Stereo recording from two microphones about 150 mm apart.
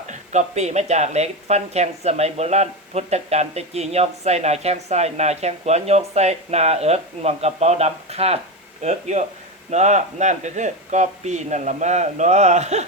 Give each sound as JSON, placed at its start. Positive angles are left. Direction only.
{"t": 0.1, "sound": "speech", "side_deg": -50}